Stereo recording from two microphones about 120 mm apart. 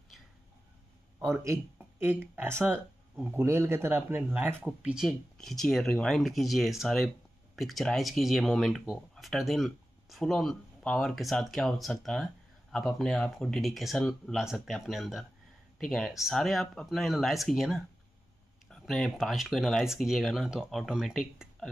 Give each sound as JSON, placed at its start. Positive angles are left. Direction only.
{"t": 1.2, "sound": "speech", "side_deg": -20}
{"t": 5.0, "sound": "speech", "side_deg": 0}